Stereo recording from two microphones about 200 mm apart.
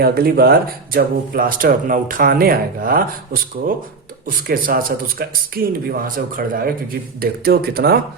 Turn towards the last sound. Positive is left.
turn(degrees=-50)  # may be behind; listen again after turning